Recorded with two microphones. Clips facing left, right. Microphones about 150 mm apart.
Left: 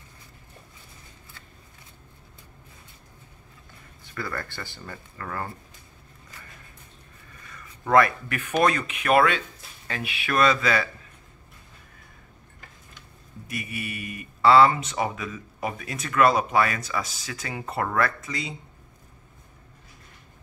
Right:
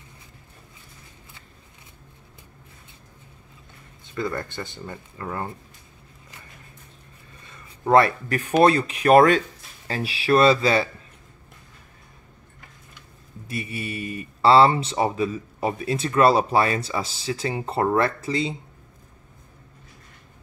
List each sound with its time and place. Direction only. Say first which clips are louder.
4.0 s speech: right 5 dB; 20° right (ahead or behind)
7.4 s speech: right 6 dB; 25° right (ahead or behind)
13.5 s speech: right 3 dB; 30° right (ahead or behind)